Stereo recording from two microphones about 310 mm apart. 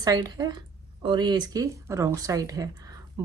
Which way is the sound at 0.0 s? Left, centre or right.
Centre.